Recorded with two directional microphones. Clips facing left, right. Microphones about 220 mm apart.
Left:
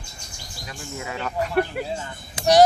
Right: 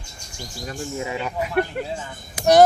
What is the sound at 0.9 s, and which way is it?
Speech, 20° right (ahead or behind).